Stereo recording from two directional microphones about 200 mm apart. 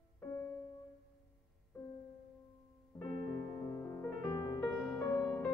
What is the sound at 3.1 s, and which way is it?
Music, 45° right (ahead or behind).